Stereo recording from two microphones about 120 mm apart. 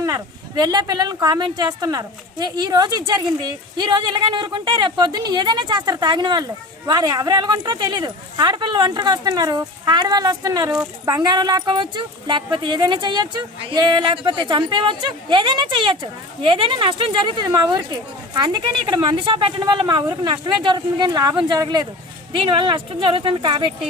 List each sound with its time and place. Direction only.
0.0 s speech: 30° right (ahead or behind)